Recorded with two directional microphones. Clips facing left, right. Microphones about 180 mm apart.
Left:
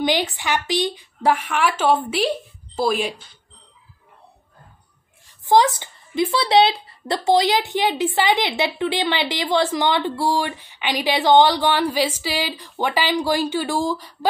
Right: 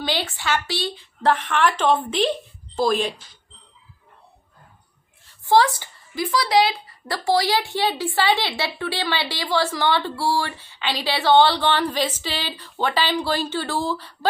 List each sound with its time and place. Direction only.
0.0 s speech: 15° left (ahead or behind)
5.5 s speech: 20° left (ahead or behind)